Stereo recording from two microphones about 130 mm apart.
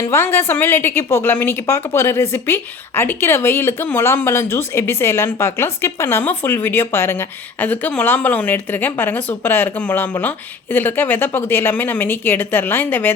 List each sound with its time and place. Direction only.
0.1 s a woman's voice: 15° left (ahead or behind)